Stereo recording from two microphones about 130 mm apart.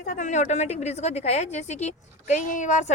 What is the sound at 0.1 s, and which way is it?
A woman's voice, 70° left (ahead or behind).